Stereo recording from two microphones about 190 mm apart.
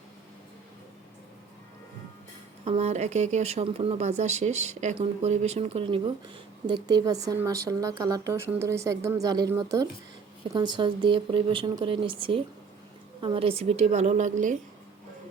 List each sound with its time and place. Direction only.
2.6 s speech: 35° right (ahead or behind)